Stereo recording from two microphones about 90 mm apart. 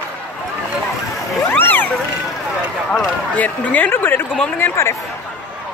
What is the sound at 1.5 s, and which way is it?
Speech, 20° left (ahead or behind).